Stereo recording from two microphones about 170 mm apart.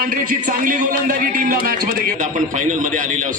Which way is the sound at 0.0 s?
50° right (ahead or behind).